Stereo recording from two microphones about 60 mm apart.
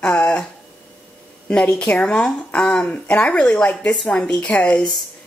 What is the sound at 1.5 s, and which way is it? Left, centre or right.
A woman's voice, centre.